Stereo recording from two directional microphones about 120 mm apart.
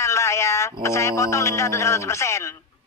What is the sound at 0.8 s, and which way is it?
A man's voice, 25° left (ahead or behind).